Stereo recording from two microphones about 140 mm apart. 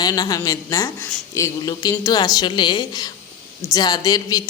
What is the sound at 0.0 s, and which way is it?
A woman's voice, 30° left (ahead or behind).